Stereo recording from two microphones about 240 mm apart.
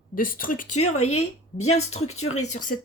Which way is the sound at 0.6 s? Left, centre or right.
Left.